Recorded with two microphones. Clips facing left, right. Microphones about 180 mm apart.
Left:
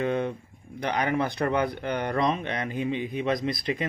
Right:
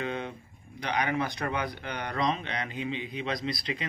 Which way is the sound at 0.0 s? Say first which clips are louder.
Left 7 dB; 50° left (ahead or behind).